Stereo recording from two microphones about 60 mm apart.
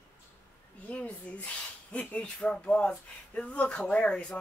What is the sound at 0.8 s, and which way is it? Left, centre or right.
Speech, left.